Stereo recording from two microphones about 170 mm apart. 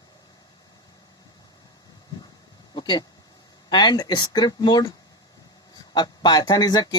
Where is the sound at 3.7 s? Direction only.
25° left (ahead or behind).